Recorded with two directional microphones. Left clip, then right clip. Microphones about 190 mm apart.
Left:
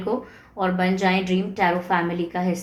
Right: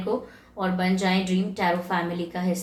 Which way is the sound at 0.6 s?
30° left (ahead or behind).